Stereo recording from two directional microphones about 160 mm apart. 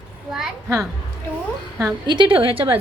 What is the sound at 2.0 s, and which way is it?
Speech, 30° right (ahead or behind).